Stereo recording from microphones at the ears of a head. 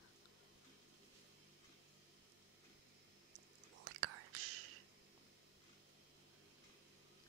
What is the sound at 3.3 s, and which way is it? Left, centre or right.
Whispering, right.